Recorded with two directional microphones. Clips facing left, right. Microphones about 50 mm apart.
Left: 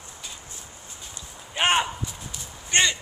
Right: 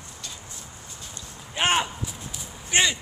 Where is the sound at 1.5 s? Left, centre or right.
Centre.